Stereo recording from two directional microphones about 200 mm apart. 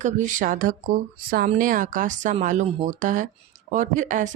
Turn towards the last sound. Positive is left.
turn(degrees=-40)  # may be behind; listen again after turning